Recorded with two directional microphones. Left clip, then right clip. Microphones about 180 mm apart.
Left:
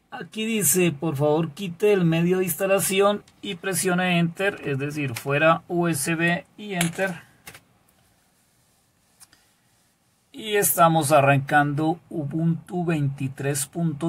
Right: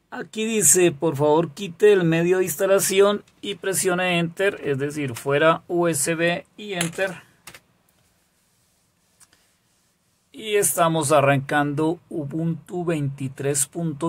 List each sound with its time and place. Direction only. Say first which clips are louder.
0.1 s speech: right 3 dB; 30° right (ahead or behind)
10.3 s speech: right 1 dB; 10° right (ahead or behind)